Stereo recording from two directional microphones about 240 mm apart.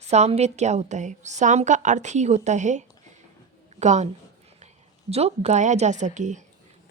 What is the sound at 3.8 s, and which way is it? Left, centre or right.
Speech, right.